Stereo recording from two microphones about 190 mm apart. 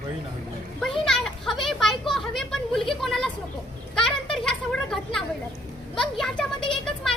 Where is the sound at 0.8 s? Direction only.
Centre (ahead or behind).